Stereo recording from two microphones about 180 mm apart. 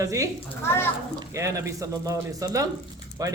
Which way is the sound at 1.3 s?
15° right (ahead or behind).